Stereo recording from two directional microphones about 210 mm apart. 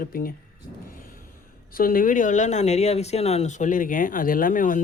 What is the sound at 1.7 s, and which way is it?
Speech, 40° left (ahead or behind).